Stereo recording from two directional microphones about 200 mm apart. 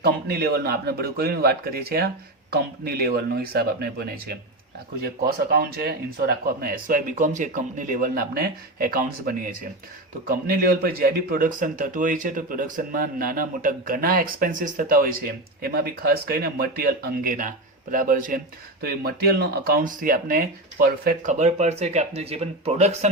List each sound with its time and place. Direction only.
0.0 s speech: 50° right (ahead or behind)
5.5 s speech: 50° right (ahead or behind); by 23.0 s 35° right (ahead or behind)